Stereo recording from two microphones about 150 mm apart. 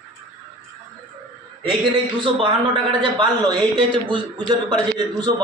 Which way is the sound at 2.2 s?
35° right (ahead or behind).